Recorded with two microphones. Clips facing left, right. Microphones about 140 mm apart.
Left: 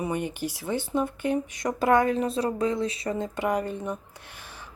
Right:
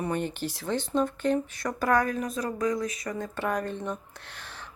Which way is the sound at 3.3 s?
15° left (ahead or behind).